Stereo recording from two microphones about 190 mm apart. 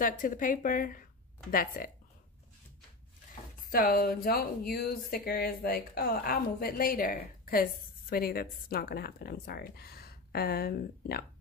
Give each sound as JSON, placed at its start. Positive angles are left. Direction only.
{"t": 0.0, "sound": "speech", "side_deg": 45}
{"t": 3.5, "sound": "speech", "side_deg": 50}